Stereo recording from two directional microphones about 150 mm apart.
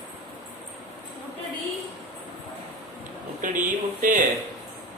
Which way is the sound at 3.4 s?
60° right (ahead or behind).